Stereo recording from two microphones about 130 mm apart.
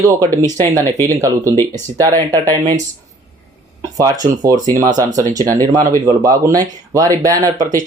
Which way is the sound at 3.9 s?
30° right (ahead or behind).